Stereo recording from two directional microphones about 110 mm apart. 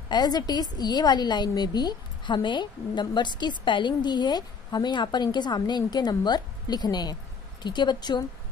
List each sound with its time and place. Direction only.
0.1 s a woman's voice: 40° left (ahead or behind)